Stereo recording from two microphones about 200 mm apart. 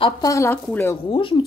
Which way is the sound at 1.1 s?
25° left (ahead or behind).